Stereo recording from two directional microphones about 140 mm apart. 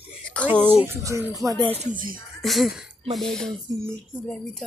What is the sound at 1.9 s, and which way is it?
Speech, 80° right.